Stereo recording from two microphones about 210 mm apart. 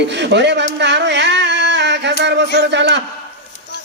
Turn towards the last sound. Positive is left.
turn(degrees=-55)  # may be behind; listen again after turning